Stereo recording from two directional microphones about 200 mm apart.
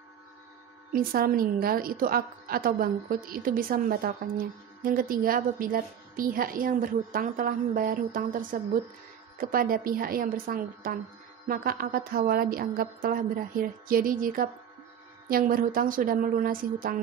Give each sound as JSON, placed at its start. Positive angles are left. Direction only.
{"t": 0.9, "sound": "a woman's voice", "side_deg": -45}